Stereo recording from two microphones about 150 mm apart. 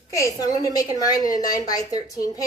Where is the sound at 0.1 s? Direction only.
20° left (ahead or behind).